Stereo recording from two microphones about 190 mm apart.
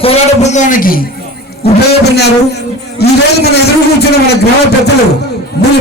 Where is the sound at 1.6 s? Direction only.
55° left (ahead or behind).